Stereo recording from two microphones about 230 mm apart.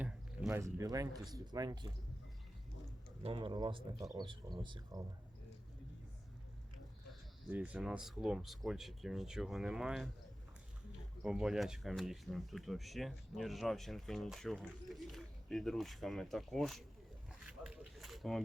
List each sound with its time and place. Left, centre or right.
0.0 s a sound: centre
1.3 s speech: centre
3.2 s speech: right
7.1 s speech: centre
11.2 s speech: centre
17.6 s a sound: centre